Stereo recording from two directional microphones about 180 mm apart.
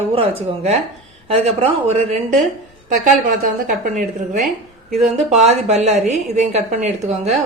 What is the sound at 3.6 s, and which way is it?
A woman's voice, 45° right (ahead or behind).